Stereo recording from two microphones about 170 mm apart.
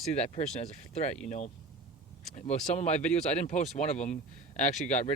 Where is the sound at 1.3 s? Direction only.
45° left (ahead or behind).